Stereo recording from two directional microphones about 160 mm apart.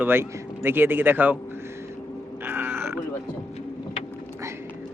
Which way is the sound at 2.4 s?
15° right (ahead or behind).